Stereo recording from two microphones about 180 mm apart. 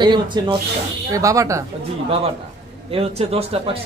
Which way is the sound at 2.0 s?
35° right (ahead or behind).